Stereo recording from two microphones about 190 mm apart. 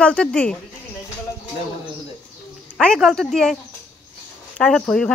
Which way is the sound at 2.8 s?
Centre (ahead or behind).